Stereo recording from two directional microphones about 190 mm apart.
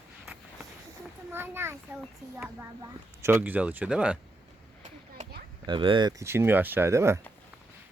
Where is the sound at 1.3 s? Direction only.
10° right (ahead or behind).